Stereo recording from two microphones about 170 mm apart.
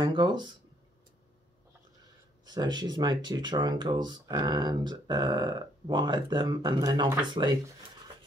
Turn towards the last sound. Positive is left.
turn(degrees=-25)  # may be behind; listen again after turning